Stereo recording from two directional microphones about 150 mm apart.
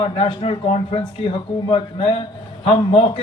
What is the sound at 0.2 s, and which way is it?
Speech, 40° left (ahead or behind).